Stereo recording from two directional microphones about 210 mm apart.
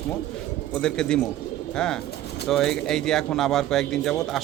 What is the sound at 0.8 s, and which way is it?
Speech, 5° left (ahead or behind).